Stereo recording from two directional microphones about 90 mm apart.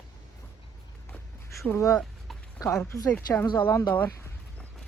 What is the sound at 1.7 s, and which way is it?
Speech, 35° left (ahead or behind).